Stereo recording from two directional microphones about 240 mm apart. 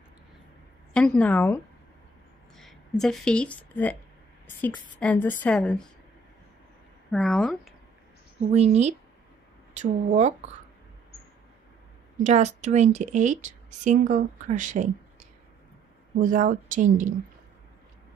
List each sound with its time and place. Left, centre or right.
0.9 s a woman's voice: centre
5.0 s speech: centre
7.1 s speech: centre
8.5 s speech: right
12.2 s a woman's voice: right